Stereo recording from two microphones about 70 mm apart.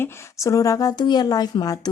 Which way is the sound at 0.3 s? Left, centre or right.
Left.